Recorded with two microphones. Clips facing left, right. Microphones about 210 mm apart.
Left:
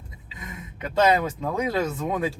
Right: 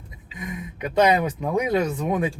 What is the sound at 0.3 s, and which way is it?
Speech, 15° right (ahead or behind).